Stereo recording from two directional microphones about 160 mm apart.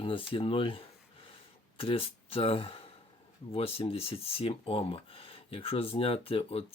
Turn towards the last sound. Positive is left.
turn(degrees=35)  # may be behind; listen again after turning